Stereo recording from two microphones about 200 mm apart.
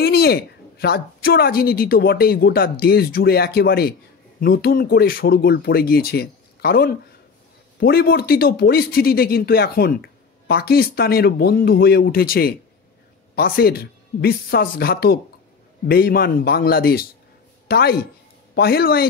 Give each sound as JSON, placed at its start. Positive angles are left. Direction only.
{"t": 0.0, "sound": "speech", "side_deg": 50}